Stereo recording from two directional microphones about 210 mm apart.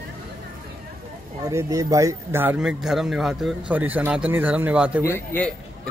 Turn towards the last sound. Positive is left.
turn(degrees=10)  # may be behind; listen again after turning